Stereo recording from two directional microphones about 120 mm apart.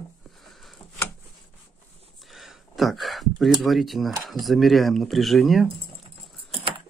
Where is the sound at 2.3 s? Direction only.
Centre (ahead or behind).